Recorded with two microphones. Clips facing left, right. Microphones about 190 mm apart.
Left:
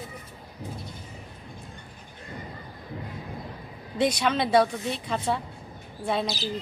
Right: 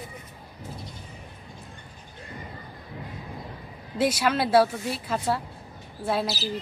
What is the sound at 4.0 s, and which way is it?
A woman's voice, 5° right (ahead or behind).